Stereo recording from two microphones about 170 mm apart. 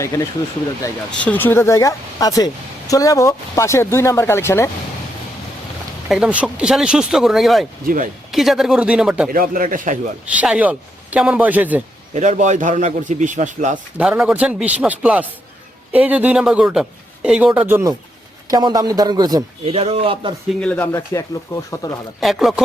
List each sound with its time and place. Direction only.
1.2 s a woman's voice: 10° left (ahead or behind)
6.1 s speech: 5° right (ahead or behind)
7.9 s a man's voice: 55° right (ahead or behind)
8.3 s speech: centre (ahead or behind)
9.3 s a man's voice: 55° right (ahead or behind)
10.3 s speech: 10° right (ahead or behind)
12.1 s a man's voice: 45° right (ahead or behind)
14.0 s a man's voice: 5° right (ahead or behind); by 19.5 s 20° right (ahead or behind)
19.6 s speech: 35° right (ahead or behind)
20.6 s a woman's voice: 10° left (ahead or behind)
22.2 s speech: centre (ahead or behind)